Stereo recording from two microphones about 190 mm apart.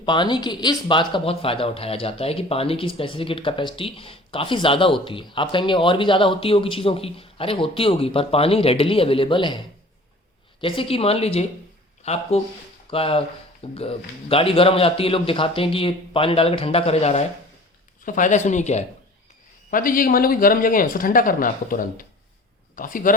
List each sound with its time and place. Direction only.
0.0 s speech: 25° left (ahead or behind)
10.6 s speech: 30° left (ahead or behind); by 23.1 s 45° left (ahead or behind)